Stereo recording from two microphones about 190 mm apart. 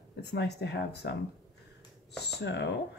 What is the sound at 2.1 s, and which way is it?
Speech, 60° left (ahead or behind).